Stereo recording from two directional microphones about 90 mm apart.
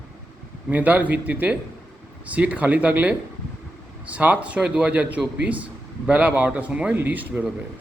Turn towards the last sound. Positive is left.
turn(degrees=-20)  # may be behind; listen again after turning